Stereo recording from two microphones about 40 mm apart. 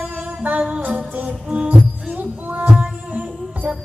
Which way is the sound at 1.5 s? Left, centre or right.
Right.